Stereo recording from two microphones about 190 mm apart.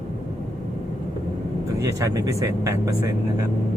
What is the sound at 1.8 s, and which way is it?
Speech, 15° right (ahead or behind).